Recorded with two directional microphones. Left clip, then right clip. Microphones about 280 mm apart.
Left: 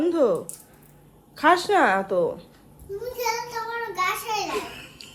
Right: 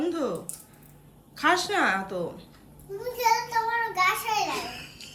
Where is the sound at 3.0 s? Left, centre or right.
Centre.